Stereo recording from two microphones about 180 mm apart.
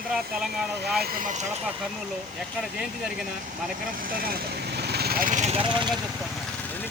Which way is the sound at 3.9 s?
50° right (ahead or behind).